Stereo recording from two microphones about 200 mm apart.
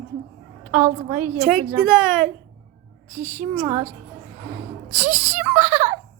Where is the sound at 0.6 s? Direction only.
10° right (ahead or behind).